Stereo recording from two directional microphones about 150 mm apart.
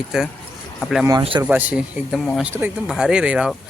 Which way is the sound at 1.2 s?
35° right (ahead or behind).